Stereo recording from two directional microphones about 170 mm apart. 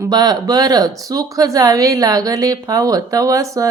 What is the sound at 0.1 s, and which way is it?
Speech, 25° right (ahead or behind).